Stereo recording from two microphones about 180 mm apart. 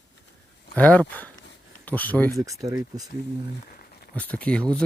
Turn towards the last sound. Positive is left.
turn(degrees=5)  # may be behind; listen again after turning